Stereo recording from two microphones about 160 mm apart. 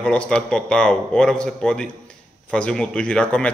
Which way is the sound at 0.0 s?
5° left (ahead or behind).